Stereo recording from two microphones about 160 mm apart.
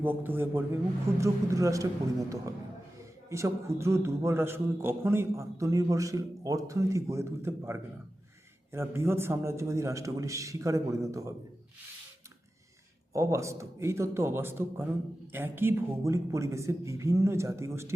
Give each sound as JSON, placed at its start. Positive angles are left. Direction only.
{"t": 0.0, "sound": "a man's voice", "side_deg": -10}
{"t": 13.1, "sound": "a man's voice", "side_deg": -20}